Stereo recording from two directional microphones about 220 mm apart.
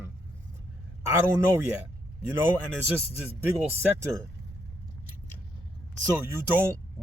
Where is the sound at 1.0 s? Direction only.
15° right (ahead or behind).